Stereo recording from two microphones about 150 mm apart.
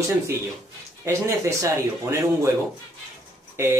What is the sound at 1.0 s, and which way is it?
Speech, 20° right (ahead or behind).